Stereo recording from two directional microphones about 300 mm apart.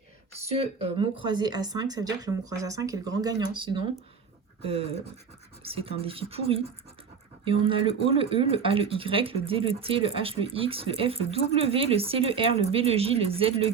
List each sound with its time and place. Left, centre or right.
0.3 s speech: centre